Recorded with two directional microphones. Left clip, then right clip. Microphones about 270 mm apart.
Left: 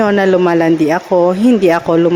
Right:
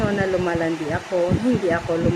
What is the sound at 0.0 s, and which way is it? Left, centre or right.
Speech, left.